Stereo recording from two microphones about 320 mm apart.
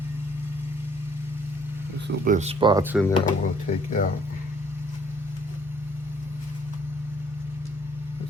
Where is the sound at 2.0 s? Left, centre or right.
Right; by 3.1 s centre.